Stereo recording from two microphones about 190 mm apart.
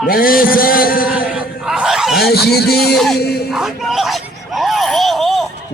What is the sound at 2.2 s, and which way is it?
Dog, 55° left (ahead or behind).